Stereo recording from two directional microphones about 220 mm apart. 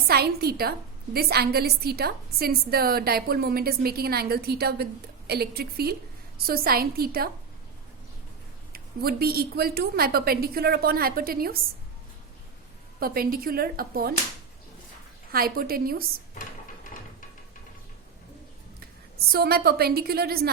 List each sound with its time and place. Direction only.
0.1 s a woman's voice: 45° right (ahead or behind)
8.7 s a woman's voice: 45° right (ahead or behind)
13.0 s a woman's voice: 40° right (ahead or behind)
15.3 s a woman's voice: 45° right (ahead or behind)
19.3 s a woman's voice: 45° right (ahead or behind)